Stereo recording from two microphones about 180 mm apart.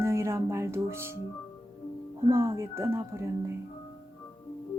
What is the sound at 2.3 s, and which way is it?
Speech, 15° right (ahead or behind).